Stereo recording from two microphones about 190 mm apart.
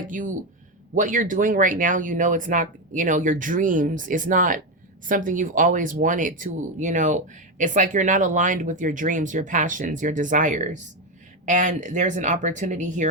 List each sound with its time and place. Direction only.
0.9 s speech: 45° right (ahead or behind)